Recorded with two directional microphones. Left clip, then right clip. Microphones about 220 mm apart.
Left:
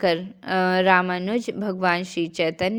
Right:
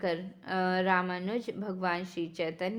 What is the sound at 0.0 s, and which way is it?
A woman's voice, 30° left (ahead or behind).